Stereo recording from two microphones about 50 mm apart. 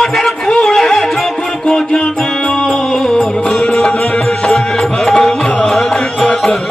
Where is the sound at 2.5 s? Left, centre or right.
Centre.